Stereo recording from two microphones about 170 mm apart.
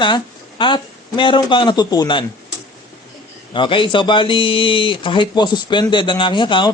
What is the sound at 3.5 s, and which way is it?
Speech, 30° left (ahead or behind).